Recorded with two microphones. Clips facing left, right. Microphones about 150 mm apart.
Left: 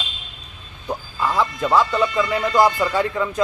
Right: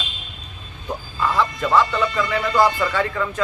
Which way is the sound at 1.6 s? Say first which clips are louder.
Left 1 dB; 10° left (ahead or behind).